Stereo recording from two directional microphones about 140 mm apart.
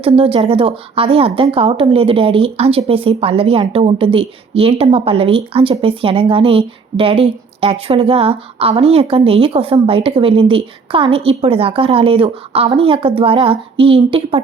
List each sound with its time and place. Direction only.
0.0 s a woman's voice: 40° right (ahead or behind)